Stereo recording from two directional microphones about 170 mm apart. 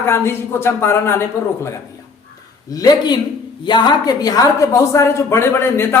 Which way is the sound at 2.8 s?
25° left (ahead or behind).